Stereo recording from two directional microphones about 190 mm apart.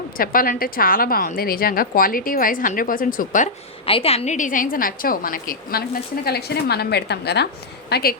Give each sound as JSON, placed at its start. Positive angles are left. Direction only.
{"t": 0.2, "sound": "a woman's voice", "side_deg": 50}
{"t": 3.8, "sound": "a woman's voice", "side_deg": 30}